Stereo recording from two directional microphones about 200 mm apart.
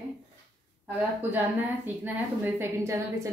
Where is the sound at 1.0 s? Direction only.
10° right (ahead or behind).